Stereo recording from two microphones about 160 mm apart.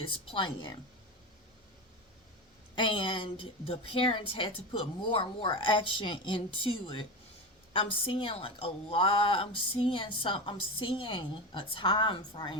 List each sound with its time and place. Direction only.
0.0 s a woman's voice: 35° left (ahead or behind)
2.7 s a woman's voice: 30° left (ahead or behind)